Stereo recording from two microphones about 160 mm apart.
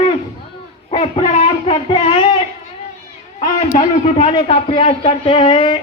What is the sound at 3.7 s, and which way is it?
Speech, 55° left (ahead or behind).